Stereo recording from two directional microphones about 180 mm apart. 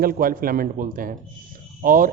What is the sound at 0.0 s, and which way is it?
Speech, 55° right (ahead or behind).